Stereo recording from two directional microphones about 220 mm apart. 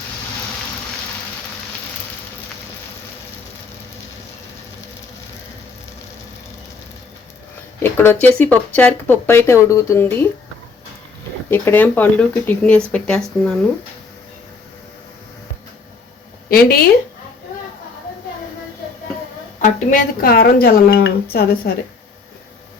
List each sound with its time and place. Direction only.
7.8 s speech: 10° left (ahead or behind)
11.5 s speech: 10° left (ahead or behind)
16.5 s a woman's voice: 45° left (ahead or behind)
19.6 s a woman's voice: 35° left (ahead or behind)